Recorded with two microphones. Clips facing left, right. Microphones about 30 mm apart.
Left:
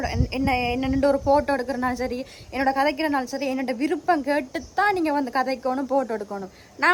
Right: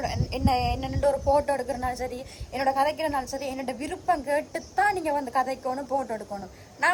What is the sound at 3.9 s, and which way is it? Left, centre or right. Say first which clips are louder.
A woman's voice: left 1 dB; left.